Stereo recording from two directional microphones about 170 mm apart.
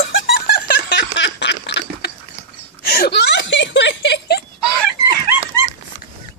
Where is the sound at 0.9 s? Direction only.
90° left.